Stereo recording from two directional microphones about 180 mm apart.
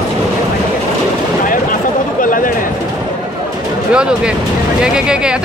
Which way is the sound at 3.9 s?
5° right (ahead or behind).